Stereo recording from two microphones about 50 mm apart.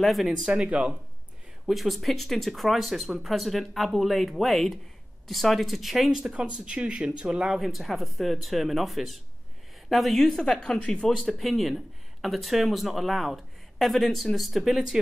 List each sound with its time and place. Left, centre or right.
0.0 s speech: centre
0.5 s speech: right
1.7 s speech: centre
6.3 s speech: right
7.4 s speech: centre
11.1 s speech: centre